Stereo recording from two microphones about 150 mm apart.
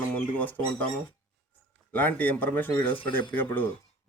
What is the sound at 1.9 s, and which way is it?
Speech, 10° left (ahead or behind).